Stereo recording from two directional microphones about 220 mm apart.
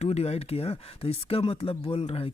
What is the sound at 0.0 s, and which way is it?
Speech, 30° left (ahead or behind).